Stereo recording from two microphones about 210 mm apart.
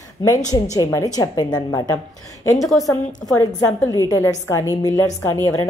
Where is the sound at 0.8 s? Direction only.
15° left (ahead or behind).